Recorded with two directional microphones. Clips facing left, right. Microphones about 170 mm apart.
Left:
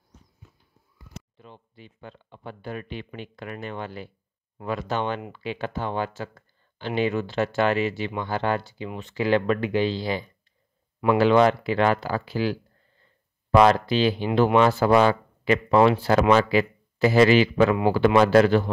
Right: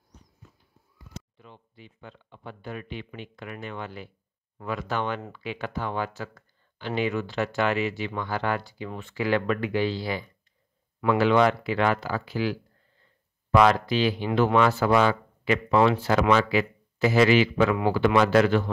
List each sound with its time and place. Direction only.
1.4 s speech: 35° left (ahead or behind)